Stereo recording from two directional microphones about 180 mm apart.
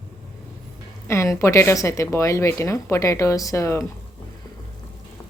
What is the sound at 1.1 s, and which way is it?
Speech, 15° left (ahead or behind).